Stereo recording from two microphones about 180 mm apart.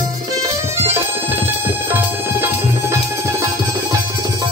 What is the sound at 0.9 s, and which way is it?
Tabla, 10° right (ahead or behind).